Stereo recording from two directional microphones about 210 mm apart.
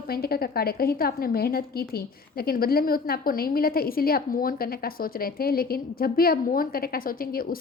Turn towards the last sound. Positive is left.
turn(degrees=45)  # may be behind; listen again after turning